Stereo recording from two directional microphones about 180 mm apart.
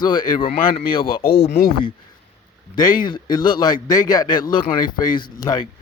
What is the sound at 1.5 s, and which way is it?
Speech, 55° left (ahead or behind).